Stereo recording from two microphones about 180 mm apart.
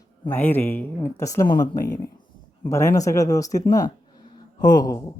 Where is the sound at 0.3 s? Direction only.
10° left (ahead or behind).